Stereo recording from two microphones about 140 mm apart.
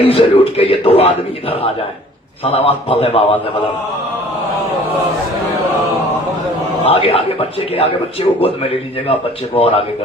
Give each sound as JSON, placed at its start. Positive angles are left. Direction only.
{"t": 0.0, "sound": "a man's voice", "side_deg": 40}
{"t": 6.8, "sound": "a man's voice", "side_deg": 45}
{"t": 9.6, "sound": "a man's voice", "side_deg": 45}